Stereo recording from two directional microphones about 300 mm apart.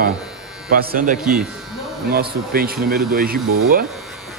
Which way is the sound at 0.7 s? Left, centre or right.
Right.